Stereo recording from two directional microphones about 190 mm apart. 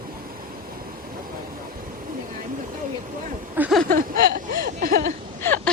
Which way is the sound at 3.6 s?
Centre (ahead or behind).